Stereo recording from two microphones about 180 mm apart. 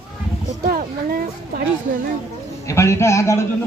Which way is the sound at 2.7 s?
15° left (ahead or behind).